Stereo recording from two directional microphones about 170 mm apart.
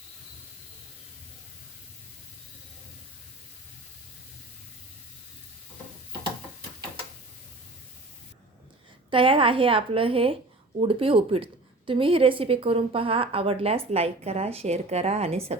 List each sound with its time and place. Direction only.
9.0 s a woman's voice: 30° right (ahead or behind)